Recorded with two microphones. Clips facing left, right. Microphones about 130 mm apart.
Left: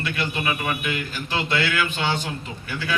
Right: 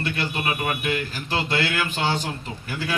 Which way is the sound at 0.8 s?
35° right (ahead or behind).